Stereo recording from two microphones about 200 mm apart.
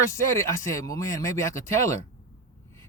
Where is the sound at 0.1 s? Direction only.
15° left (ahead or behind).